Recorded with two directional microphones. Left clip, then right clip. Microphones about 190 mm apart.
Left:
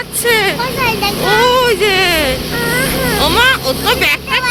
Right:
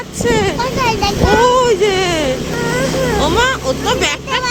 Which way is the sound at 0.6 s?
30° right (ahead or behind).